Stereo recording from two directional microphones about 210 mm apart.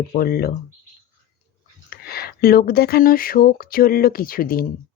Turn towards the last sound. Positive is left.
turn(degrees=45)  # may be behind; listen again after turning